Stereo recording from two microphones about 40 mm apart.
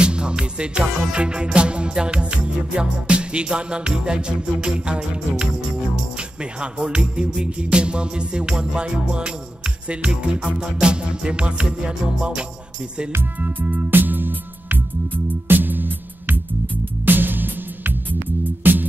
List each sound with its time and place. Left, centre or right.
0.0 s music: right
6.9 s music: right
13.4 s music: right